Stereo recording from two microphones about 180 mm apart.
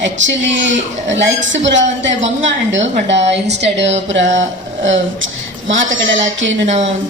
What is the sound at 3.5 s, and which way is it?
A woman's voice, 75° right (ahead or behind).